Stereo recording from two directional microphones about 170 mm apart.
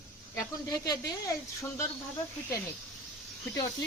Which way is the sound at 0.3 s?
20° left (ahead or behind).